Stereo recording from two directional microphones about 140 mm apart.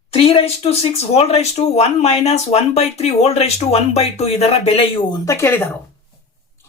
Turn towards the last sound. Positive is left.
turn(degrees=15)  # may be behind; listen again after turning